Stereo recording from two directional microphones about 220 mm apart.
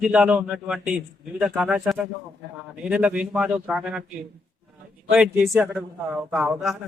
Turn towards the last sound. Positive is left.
turn(degrees=0)  # may be behind; listen again after turning